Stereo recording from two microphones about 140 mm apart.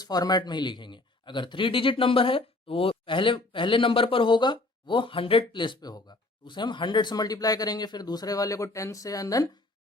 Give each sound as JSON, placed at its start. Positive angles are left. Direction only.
{"t": 0.0, "sound": "speech", "side_deg": 30}